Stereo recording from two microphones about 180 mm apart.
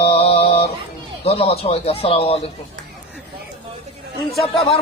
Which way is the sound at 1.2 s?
35° left (ahead or behind).